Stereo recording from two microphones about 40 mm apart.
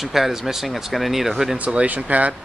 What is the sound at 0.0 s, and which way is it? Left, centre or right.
Speech, centre.